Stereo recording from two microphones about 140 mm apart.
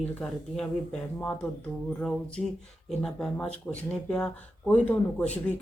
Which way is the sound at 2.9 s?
5° left (ahead or behind).